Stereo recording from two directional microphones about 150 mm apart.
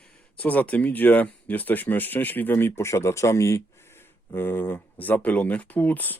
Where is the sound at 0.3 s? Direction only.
10° left (ahead or behind).